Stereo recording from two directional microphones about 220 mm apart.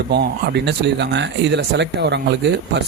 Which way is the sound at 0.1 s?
50° right (ahead or behind).